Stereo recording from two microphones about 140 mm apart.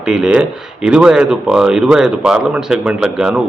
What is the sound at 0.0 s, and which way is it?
Speech, 5° right (ahead or behind).